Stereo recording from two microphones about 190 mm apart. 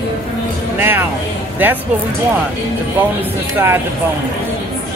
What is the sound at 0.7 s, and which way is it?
Speech, 10° right (ahead or behind).